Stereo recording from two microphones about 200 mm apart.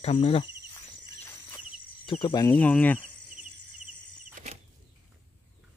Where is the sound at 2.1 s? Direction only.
25° left (ahead or behind).